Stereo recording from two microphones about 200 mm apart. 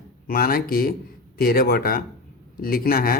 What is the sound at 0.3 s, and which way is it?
Speech, 50° left (ahead or behind).